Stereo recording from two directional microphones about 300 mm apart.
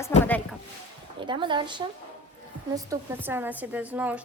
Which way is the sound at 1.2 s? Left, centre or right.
Centre.